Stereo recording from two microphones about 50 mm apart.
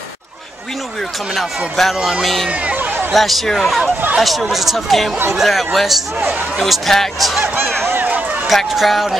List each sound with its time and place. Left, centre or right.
1.3 s speech: centre
2.6 s a sound: right
3.1 s speech: centre
8.5 s speech: centre